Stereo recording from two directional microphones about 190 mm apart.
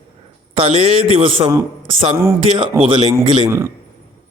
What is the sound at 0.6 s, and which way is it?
Speech, 30° right (ahead or behind).